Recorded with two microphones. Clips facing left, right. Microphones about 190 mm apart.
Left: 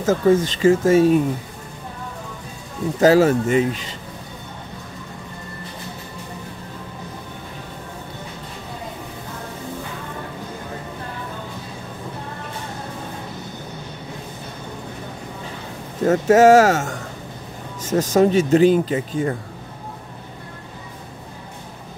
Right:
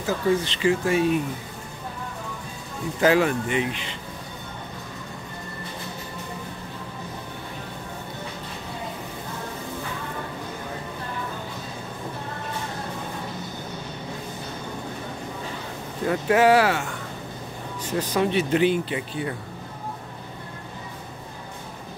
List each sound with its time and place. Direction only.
0.0 s speech: 45° left (ahead or behind)
3.0 s speech: 40° left (ahead or behind)
16.0 s speech: 45° left (ahead or behind)